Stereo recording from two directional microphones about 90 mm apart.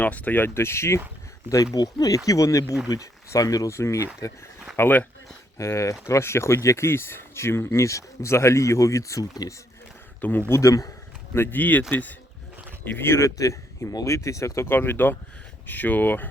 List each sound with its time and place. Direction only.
0.0 s speech: 15° left (ahead or behind)
1.7 s speech: 45° left (ahead or behind)
4.8 s speech: 20° left (ahead or behind)
5.5 s speech: 35° left (ahead or behind)
10.2 s speech: 20° left (ahead or behind)
10.6 s speech: 40° left (ahead or behind)
11.3 s speech: 20° left (ahead or behind)